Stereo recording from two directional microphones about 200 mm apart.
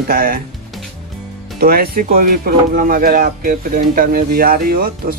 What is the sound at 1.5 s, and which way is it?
Speech, 50° right (ahead or behind).